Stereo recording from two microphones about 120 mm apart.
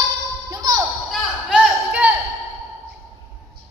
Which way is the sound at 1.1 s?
Centre (ahead or behind).